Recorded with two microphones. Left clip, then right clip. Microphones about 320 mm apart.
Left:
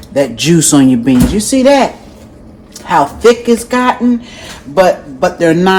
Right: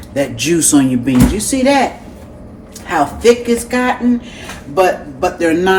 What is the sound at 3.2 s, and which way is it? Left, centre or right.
Speech, left.